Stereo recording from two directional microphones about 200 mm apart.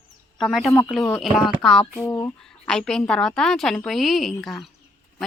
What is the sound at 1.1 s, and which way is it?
Speech, centre (ahead or behind).